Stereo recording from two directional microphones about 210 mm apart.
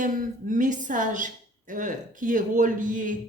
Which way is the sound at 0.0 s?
40° right (ahead or behind).